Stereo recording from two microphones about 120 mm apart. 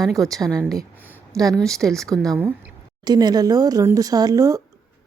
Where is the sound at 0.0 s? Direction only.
Centre (ahead or behind).